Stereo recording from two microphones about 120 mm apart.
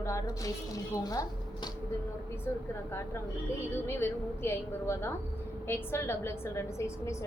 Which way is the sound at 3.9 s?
20° left (ahead or behind).